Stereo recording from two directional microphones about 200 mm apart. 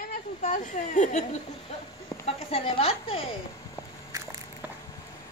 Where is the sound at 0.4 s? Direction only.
40° left (ahead or behind).